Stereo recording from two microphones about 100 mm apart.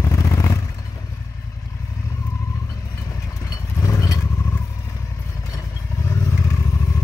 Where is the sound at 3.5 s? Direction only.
30° left (ahead or behind).